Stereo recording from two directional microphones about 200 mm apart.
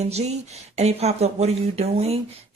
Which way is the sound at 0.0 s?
35° right (ahead or behind).